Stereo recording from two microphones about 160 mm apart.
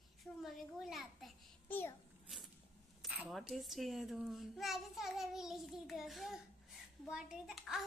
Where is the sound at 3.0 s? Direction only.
5° right (ahead or behind).